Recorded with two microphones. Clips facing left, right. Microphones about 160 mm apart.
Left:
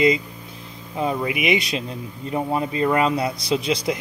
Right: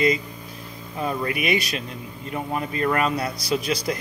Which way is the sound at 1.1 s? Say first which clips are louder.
Left 1 dB; 15° left (ahead or behind).